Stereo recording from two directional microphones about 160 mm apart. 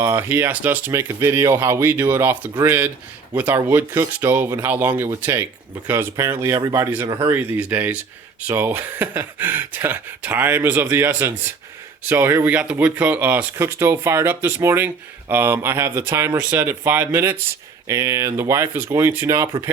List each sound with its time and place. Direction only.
0.0 s speech: 10° right (ahead or behind)